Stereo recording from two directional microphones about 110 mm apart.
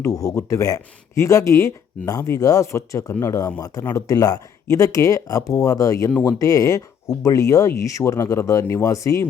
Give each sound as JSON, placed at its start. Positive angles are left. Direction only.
{"t": 0.2, "sound": "speech", "side_deg": 30}